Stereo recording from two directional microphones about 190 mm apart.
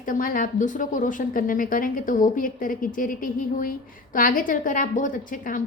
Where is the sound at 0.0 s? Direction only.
45° left (ahead or behind).